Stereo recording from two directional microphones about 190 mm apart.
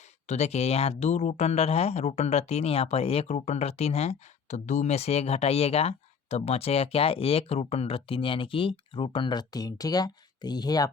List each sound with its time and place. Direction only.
0.3 s speech: 35° left (ahead or behind)